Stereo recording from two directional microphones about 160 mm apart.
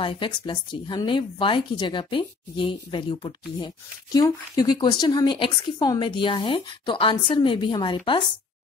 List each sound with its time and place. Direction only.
0.0 s speech: 35° left (ahead or behind)